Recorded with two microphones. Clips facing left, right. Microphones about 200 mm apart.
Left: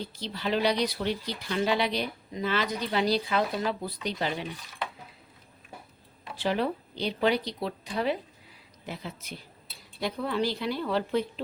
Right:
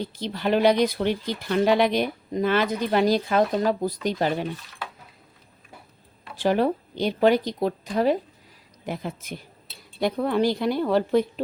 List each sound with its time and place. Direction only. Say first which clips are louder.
0.2 s speech: right 7 dB; 55° right (ahead or behind)
6.3 s speech: right 6 dB; 45° right (ahead or behind)